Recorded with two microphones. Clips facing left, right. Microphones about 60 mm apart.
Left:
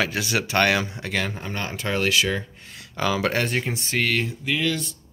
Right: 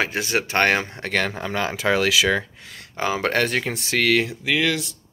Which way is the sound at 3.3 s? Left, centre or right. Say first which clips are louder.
Right 3 dB; right.